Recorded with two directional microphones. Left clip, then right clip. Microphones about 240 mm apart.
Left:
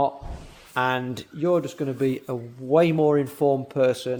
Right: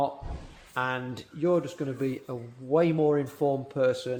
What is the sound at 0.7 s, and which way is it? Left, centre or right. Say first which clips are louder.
Speech: left 6 dB; left.